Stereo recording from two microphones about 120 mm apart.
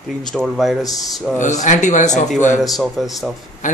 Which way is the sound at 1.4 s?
90° left.